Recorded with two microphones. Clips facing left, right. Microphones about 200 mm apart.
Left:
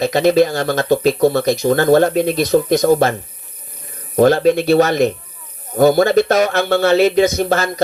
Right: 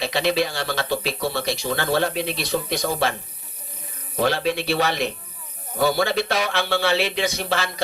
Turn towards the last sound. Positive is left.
turn(degrees=45)  # may be behind; listen again after turning